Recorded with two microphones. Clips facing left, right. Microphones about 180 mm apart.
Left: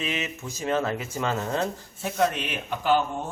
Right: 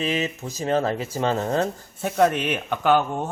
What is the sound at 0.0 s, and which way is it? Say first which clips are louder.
A man's voice: right 6 dB; 35° right (ahead or behind).